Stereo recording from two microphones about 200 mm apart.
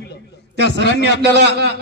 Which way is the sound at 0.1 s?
60° left (ahead or behind).